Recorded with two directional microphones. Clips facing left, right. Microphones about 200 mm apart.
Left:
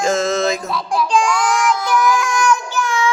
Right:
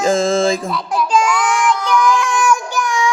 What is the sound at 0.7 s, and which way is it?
Child singing, centre (ahead or behind).